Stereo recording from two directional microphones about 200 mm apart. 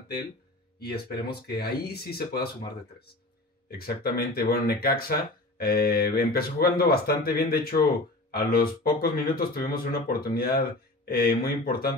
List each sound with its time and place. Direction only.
0.7 s speech: 50° left (ahead or behind)
3.7 s speech: 50° left (ahead or behind)